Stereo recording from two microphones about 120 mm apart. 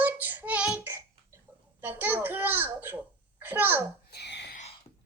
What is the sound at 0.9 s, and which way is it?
Hiccup, 25° right (ahead or behind).